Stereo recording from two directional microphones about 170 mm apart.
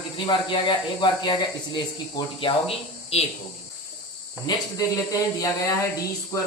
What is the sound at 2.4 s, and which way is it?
Speech, 30° left (ahead or behind).